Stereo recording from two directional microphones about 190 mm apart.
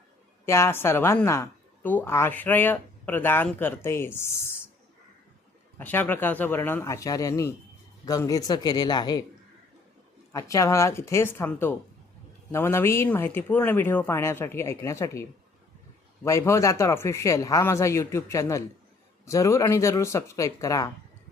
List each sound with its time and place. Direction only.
0.4 s a woman's voice: 15° left (ahead or behind)
5.8 s a woman's voice: 10° left (ahead or behind)
10.3 s a woman's voice: 15° left (ahead or behind)